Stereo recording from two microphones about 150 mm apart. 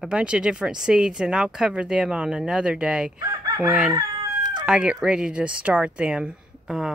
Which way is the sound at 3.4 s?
25° right (ahead or behind).